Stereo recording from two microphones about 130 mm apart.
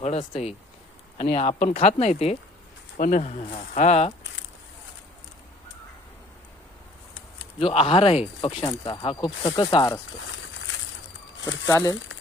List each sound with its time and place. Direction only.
0.0 s speech: 50° left (ahead or behind)
3.0 s speech: 70° left (ahead or behind)
7.6 s speech: 50° left (ahead or behind)
11.6 s speech: 25° left (ahead or behind)